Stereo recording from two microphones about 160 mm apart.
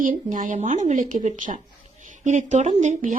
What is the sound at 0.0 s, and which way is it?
Speech, 55° right (ahead or behind).